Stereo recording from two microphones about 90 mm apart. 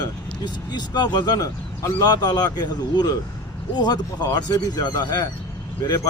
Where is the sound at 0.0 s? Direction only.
55° left (ahead or behind).